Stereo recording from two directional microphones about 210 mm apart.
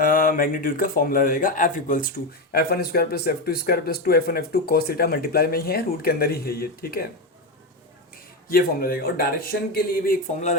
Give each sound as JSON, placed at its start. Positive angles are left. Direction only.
{"t": 0.0, "sound": "speech", "side_deg": 40}
{"t": 8.4, "sound": "speech", "side_deg": 45}